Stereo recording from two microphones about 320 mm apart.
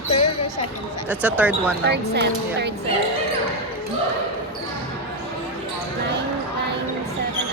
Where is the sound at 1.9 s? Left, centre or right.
Right.